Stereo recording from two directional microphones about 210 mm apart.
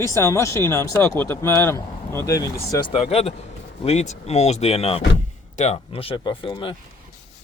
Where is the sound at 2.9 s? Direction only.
30° left (ahead or behind).